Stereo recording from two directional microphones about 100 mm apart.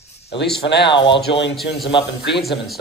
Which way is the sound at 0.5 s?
55° left (ahead or behind).